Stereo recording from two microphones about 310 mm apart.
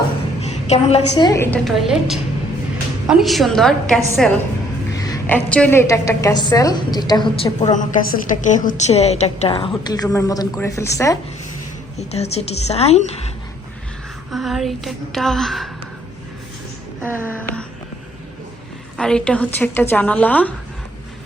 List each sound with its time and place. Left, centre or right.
0.4 s a sound: left
1.1 s a woman's voice: centre
11.9 s a woman's voice: left
14.3 s a woman's voice: centre
17.0 s a sound: centre
18.9 s a woman's voice: centre